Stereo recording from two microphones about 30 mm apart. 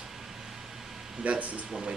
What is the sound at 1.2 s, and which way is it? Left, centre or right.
Speech, right.